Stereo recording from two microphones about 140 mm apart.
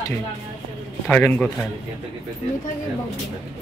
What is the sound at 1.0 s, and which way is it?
Speech, 10° left (ahead or behind).